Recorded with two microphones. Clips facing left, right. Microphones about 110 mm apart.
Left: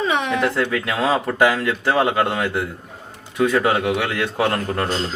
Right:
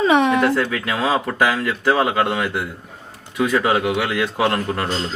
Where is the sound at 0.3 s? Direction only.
Centre (ahead or behind).